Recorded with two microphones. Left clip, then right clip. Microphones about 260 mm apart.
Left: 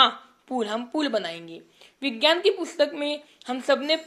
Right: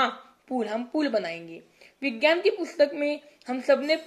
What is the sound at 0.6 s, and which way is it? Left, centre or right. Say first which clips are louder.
A woman's voice: left 1 dB; left.